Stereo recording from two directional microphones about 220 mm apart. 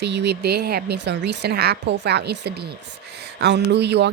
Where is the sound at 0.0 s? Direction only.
50° right (ahead or behind).